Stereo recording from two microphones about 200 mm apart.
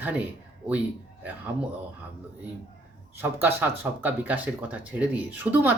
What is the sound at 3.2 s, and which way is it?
Speech, 10° right (ahead or behind).